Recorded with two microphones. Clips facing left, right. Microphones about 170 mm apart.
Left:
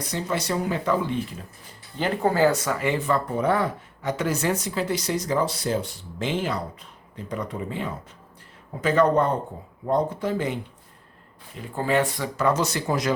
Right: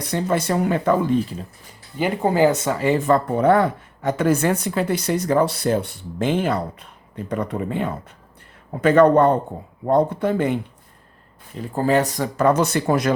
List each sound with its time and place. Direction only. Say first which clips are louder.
0.0 s speech: right 6 dB; 55° right (ahead or behind)
2.0 s speech: right 3 dB; 15° right (ahead or behind); by 10.6 s 55° right (ahead or behind)
11.7 s speech: right 4 dB; 40° right (ahead or behind); by 13.1 s 55° right (ahead or behind)